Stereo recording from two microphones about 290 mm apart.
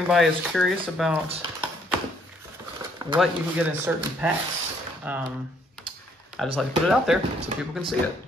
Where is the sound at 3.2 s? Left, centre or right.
Centre.